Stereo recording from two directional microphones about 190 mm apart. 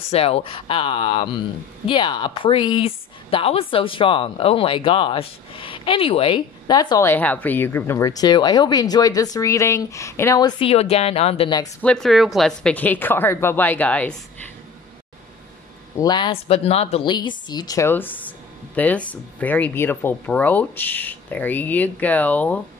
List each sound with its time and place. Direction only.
0.1 s a woman's voice: 30° left (ahead or behind); by 10.5 s 15° left (ahead or behind)
10.6 s a woman's voice: 30° left (ahead or behind)
11.8 s speech: 5° left (ahead or behind)
16.0 s a woman's voice: 20° left (ahead or behind)